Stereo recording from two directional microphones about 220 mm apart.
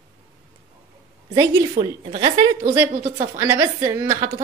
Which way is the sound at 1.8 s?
40° right (ahead or behind).